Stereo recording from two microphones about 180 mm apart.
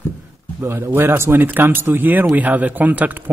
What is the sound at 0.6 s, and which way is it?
Speech, 15° right (ahead or behind).